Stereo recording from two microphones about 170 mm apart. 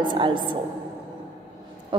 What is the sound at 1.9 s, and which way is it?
Speech, 30° right (ahead or behind).